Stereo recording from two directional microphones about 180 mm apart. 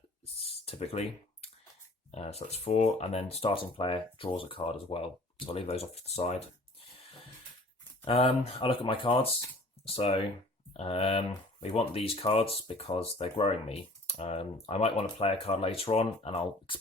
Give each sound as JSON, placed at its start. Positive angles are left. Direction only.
{"t": 0.3, "sound": "a sound", "side_deg": 35}
{"t": 2.1, "sound": "speech", "side_deg": 35}
{"t": 8.0, "sound": "speech", "side_deg": 30}